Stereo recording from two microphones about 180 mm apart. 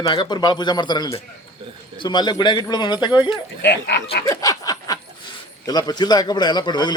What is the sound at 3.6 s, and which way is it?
Speech, 70° left (ahead or behind).